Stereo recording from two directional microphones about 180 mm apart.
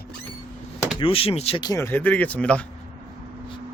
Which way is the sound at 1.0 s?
30° left (ahead or behind).